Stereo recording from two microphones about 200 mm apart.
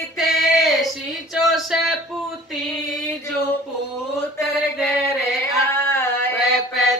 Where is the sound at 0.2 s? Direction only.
Centre (ahead or behind).